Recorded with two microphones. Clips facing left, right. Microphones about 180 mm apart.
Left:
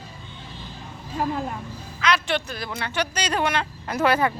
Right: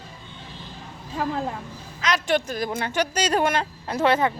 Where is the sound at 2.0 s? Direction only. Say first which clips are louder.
Right 1 dB; 45° right (ahead or behind).